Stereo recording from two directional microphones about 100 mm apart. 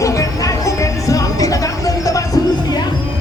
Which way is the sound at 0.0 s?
35° left (ahead or behind).